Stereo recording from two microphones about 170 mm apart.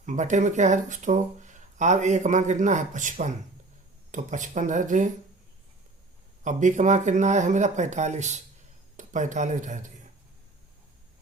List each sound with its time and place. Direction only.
0.0 s speech: 45° right (ahead or behind)
6.4 s speech: 45° right (ahead or behind)